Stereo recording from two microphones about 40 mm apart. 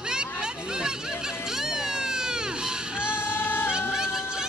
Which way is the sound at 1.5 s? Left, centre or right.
Centre.